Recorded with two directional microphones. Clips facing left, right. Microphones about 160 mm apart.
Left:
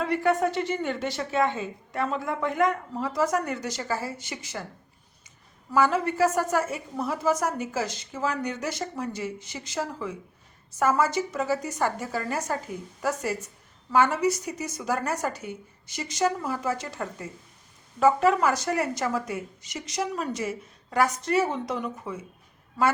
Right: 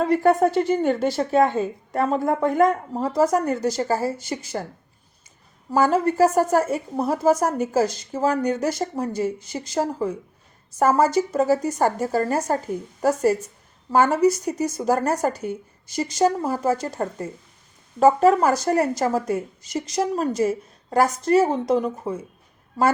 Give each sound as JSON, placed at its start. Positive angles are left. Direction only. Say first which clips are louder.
{"t": 0.0, "sound": "a woman's voice", "louder": "right 6 dB", "side_deg": -40}
{"t": 5.7, "sound": "a woman's voice", "louder": "right 4 dB", "side_deg": -40}